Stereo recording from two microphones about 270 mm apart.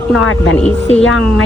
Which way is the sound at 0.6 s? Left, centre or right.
Centre.